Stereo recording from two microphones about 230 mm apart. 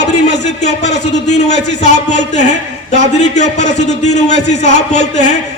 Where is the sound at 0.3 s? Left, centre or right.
Left.